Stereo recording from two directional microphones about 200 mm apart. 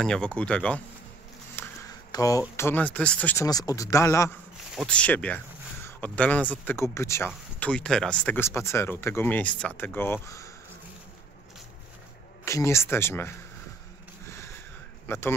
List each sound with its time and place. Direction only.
0.0 s speech: 5° left (ahead or behind)
1.6 s a sound: 15° left (ahead or behind)
2.5 s speech: 10° left (ahead or behind)
3.4 s speech: 20° left (ahead or behind)
12.4 s speech: 15° left (ahead or behind)
14.2 s a sound: 15° left (ahead or behind)
15.0 s speech: 10° left (ahead or behind)